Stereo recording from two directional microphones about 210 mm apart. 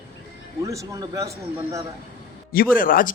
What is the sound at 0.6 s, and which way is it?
Speech, 15° right (ahead or behind).